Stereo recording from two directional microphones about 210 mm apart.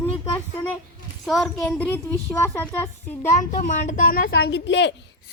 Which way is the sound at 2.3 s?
10° left (ahead or behind).